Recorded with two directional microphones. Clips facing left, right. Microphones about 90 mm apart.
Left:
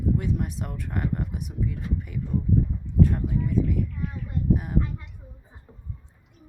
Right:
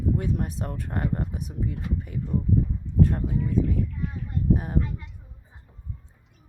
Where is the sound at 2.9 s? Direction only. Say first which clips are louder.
Left 1 dB; 40° right (ahead or behind).